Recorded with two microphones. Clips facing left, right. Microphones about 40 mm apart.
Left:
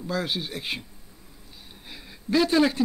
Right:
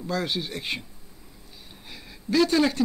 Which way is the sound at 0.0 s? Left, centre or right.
Centre.